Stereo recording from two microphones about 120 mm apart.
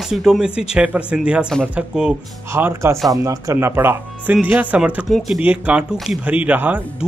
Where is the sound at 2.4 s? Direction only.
20° right (ahead or behind).